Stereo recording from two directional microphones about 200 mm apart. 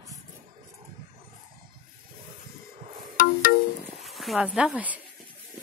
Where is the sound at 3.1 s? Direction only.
45° left (ahead or behind).